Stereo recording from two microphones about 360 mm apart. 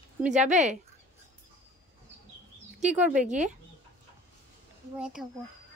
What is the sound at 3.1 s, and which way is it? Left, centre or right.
Speech, centre.